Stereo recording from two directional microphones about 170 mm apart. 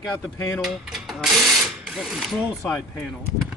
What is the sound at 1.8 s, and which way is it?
Ratchet, 5° right (ahead or behind).